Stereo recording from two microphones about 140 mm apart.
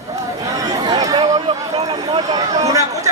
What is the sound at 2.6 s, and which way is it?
Speech, 25° right (ahead or behind).